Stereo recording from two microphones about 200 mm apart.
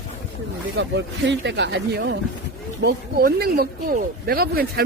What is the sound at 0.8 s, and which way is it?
Speech, 60° right (ahead or behind).